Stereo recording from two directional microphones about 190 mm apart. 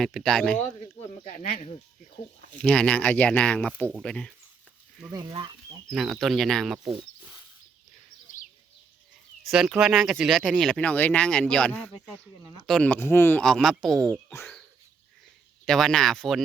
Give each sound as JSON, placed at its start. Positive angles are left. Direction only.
{"t": 0.0, "sound": "speech", "side_deg": 0}
{"t": 1.3, "sound": "speech", "side_deg": 40}
{"t": 2.6, "sound": "speech", "side_deg": 5}
{"t": 5.1, "sound": "speech", "side_deg": -25}
{"t": 5.9, "sound": "speech", "side_deg": 0}
{"t": 9.5, "sound": "speech", "side_deg": -5}
{"t": 15.6, "sound": "speech", "side_deg": 0}